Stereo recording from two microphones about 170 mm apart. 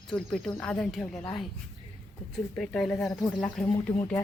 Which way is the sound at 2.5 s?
5° left (ahead or behind).